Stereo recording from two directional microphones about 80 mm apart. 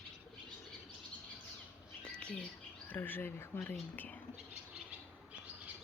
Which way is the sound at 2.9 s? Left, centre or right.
Left.